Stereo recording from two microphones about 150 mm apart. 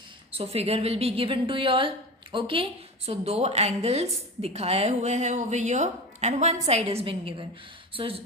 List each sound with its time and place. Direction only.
0.3 s a woman's voice: 40° right (ahead or behind)